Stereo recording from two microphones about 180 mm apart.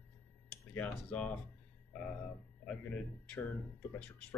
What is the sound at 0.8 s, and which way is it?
Speech, 10° left (ahead or behind).